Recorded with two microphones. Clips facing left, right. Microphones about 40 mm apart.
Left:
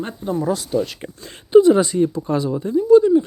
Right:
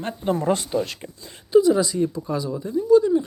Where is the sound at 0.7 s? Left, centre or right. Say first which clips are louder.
Left 3 dB; right.